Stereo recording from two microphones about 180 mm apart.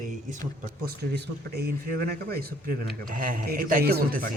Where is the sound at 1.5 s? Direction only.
55° right (ahead or behind).